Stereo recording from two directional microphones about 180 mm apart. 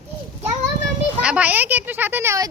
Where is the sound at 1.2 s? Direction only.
5° right (ahead or behind).